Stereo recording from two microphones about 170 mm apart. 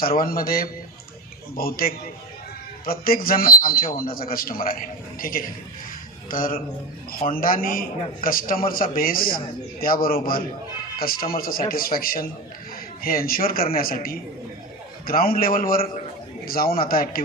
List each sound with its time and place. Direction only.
0.0 s a man's voice: 60° left (ahead or behind)